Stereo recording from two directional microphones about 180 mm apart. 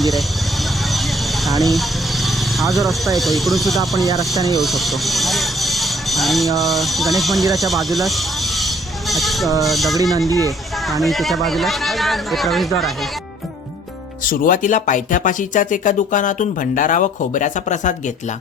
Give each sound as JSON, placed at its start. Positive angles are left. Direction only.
{"t": 0.0, "sound": "vehicle", "side_deg": 0}
{"t": 3.2, "sound": "speech", "side_deg": 0}
{"t": 7.5, "sound": "a sound", "side_deg": 0}
{"t": 9.6, "sound": "speech", "side_deg": 0}
{"t": 10.2, "sound": "speech", "side_deg": -20}
{"t": 10.8, "sound": "speech", "side_deg": 0}
{"t": 14.3, "sound": "speech", "side_deg": 50}